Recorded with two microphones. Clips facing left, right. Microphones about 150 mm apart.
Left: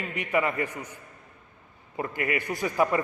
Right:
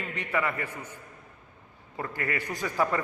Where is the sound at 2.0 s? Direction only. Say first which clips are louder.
Left 3 dB; 15° left (ahead or behind).